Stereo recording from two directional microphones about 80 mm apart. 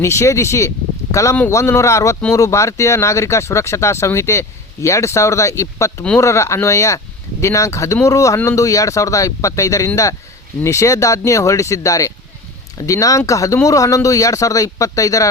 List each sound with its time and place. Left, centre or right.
0.0 s speech: left